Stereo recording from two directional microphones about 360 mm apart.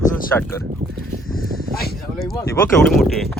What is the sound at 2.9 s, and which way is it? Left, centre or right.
Speech, centre.